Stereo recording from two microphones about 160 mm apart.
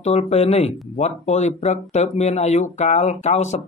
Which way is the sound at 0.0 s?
40° left (ahead or behind).